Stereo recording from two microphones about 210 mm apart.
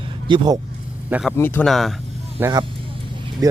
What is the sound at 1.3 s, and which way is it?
Speech, 10° left (ahead or behind).